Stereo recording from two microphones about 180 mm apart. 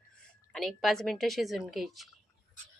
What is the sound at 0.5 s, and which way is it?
Speech, centre (ahead or behind).